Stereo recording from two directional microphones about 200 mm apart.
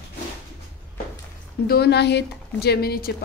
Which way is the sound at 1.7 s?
55° left (ahead or behind).